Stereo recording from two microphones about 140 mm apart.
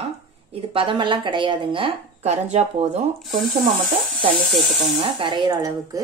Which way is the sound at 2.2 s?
55° right (ahead or behind).